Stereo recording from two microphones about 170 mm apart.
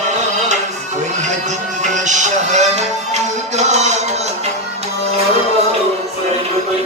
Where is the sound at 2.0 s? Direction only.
45° right (ahead or behind).